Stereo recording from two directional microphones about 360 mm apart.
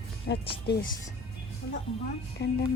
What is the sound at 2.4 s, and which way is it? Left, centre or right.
Speech, left.